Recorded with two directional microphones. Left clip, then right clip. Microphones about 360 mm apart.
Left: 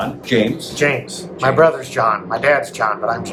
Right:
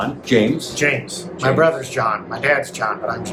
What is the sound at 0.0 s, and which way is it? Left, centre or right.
Speech, centre.